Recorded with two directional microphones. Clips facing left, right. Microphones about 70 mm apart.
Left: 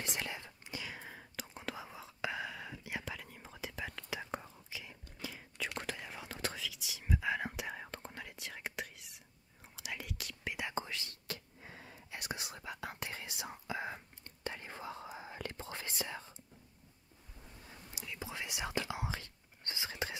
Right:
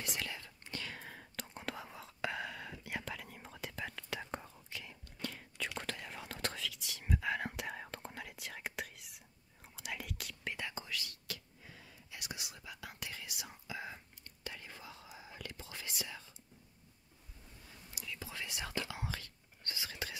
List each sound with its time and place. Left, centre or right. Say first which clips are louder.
0.0 s whispering: left 1 dB; left
0.7 s whispering: even; centre
10.7 s whispering: left 4 dB; left
17.6 s whispering: even; left